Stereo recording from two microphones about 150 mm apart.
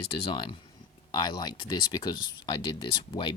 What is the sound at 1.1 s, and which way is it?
Speech, 30° left (ahead or behind).